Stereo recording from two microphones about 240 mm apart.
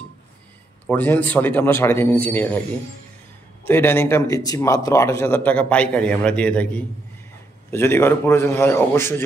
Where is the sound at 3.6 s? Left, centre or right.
Centre.